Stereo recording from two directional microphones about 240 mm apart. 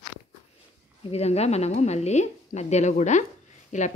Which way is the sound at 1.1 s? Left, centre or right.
Left.